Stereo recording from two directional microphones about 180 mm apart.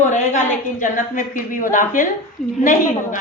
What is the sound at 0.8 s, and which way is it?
A woman's voice, 50° left (ahead or behind).